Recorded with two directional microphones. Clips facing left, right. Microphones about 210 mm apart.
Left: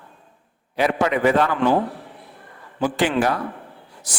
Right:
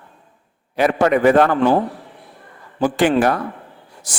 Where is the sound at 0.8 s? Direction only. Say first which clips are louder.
Right 4 dB; 50° right (ahead or behind).